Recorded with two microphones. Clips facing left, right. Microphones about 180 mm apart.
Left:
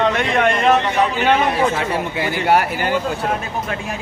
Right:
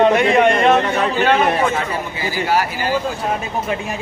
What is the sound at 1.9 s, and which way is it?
Speech, 65° left (ahead or behind).